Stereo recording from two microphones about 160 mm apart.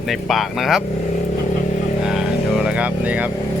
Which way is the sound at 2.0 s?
5° right (ahead or behind).